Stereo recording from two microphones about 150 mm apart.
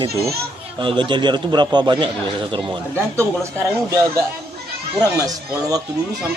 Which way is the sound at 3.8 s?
20° right (ahead or behind).